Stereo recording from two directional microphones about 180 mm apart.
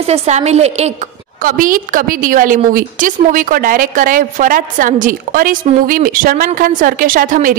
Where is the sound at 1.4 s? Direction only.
50° right (ahead or behind).